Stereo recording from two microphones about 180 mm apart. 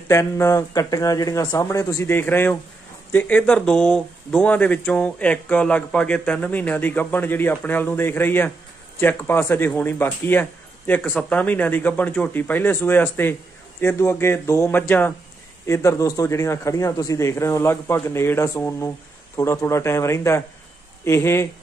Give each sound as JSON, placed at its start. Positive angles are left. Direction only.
{"t": 0.1, "sound": "speech", "side_deg": 15}